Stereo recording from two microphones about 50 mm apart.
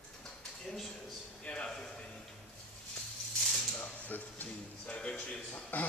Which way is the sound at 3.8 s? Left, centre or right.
Left.